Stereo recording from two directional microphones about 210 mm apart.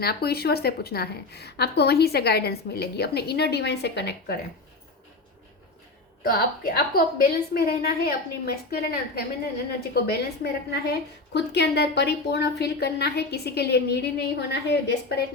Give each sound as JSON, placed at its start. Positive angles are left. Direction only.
{"t": 0.0, "sound": "a woman's voice", "side_deg": 50}
{"t": 6.2, "sound": "a woman's voice", "side_deg": 45}